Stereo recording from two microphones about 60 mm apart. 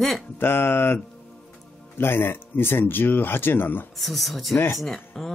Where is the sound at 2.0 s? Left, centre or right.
Left.